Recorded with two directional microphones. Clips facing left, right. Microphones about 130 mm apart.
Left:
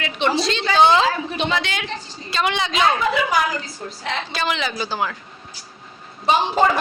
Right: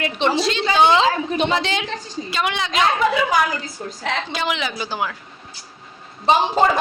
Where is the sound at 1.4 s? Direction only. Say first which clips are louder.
Right 3 dB; 35° right (ahead or behind).